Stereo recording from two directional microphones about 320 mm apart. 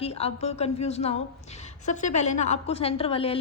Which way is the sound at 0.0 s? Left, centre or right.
Centre.